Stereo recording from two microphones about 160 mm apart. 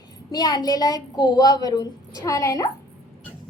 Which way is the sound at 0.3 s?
25° left (ahead or behind).